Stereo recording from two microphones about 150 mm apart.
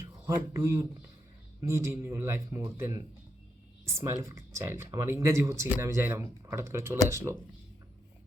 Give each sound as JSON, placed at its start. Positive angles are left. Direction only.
{"t": 0.0, "sound": "speech", "side_deg": -15}